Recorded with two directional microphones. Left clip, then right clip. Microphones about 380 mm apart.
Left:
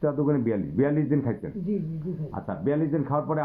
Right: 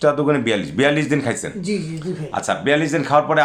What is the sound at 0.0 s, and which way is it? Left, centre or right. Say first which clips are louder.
Speech: right 9 dB; centre.